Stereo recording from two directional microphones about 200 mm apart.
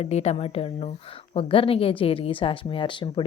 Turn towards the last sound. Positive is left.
turn(degrees=25)  # may be behind; listen again after turning